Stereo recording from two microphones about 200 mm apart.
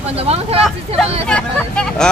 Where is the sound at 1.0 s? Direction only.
5° left (ahead or behind).